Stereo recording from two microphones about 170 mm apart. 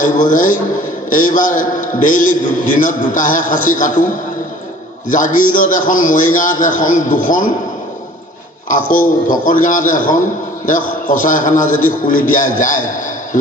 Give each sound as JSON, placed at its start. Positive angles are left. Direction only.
{"t": 0.0, "sound": "a man's voice", "side_deg": 50}
{"t": 8.9, "sound": "a man's voice", "side_deg": 50}